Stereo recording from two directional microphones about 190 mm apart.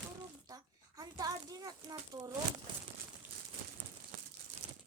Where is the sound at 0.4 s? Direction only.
20° right (ahead or behind).